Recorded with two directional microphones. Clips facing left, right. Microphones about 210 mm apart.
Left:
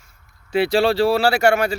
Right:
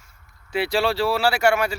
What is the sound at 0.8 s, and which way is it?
Speech, 25° left (ahead or behind).